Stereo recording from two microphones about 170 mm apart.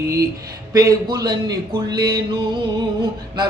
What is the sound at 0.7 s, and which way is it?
Mantra, 20° right (ahead or behind).